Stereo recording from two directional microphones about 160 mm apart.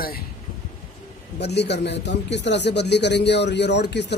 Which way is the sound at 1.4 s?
90° left.